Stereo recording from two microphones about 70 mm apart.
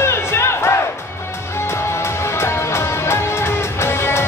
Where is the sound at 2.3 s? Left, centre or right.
Left.